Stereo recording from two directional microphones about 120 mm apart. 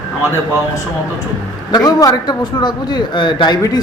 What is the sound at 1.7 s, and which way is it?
A man's voice, 35° left (ahead or behind).